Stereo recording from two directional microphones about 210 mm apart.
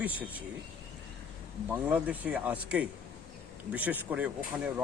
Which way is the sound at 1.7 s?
10° right (ahead or behind).